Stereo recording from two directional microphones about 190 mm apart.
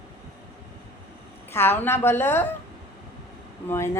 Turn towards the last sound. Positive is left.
turn(degrees=15)  # may be behind; listen again after turning